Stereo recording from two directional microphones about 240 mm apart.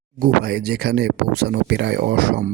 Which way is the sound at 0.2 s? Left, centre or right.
Right.